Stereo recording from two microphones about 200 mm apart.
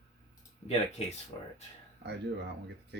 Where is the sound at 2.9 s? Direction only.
60° right (ahead or behind).